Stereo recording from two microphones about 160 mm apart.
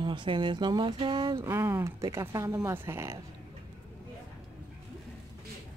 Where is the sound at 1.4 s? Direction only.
15° right (ahead or behind).